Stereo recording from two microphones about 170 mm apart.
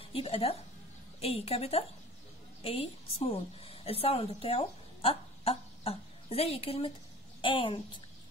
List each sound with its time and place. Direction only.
0.0 s a woman's voice: 35° left (ahead or behind)